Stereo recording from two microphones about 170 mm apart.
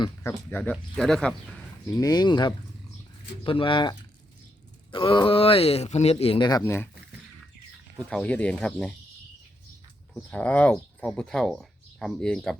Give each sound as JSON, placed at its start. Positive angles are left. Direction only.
{"t": 0.0, "sound": "speech", "side_deg": 15}
{"t": 1.9, "sound": "speech", "side_deg": 20}
{"t": 7.9, "sound": "speech", "side_deg": 5}
{"t": 10.2, "sound": "speech", "side_deg": 10}